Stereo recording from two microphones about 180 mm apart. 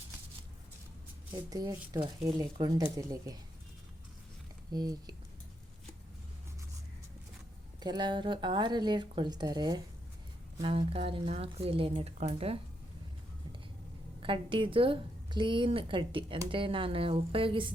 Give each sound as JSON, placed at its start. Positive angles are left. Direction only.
{"t": 1.4, "sound": "a woman's voice", "side_deg": -20}
{"t": 4.7, "sound": "a woman's voice", "side_deg": -20}
{"t": 7.8, "sound": "a woman's voice", "side_deg": -25}
{"t": 14.2, "sound": "a woman's voice", "side_deg": -30}